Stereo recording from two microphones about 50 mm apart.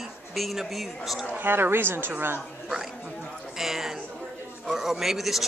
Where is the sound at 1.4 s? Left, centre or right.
Right.